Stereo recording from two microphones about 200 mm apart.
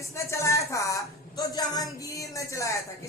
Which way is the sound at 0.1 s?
15° left (ahead or behind).